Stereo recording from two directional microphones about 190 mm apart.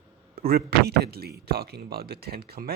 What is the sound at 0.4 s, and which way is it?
Speech, 55° right (ahead or behind).